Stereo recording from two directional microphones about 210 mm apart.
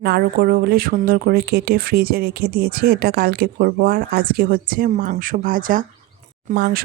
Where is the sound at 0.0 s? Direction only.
50° right (ahead or behind).